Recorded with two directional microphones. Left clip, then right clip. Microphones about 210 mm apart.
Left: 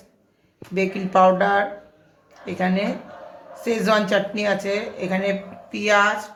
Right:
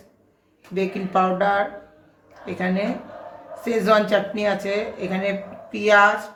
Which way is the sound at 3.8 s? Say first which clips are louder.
Right 2 dB; 20° left (ahead or behind).